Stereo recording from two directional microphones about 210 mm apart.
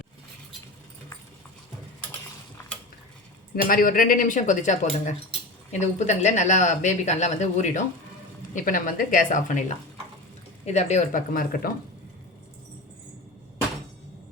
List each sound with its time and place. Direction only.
3.5 s speech: 45° left (ahead or behind)